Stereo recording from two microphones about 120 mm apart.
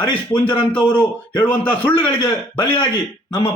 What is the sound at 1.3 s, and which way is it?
A man's voice, 15° left (ahead or behind).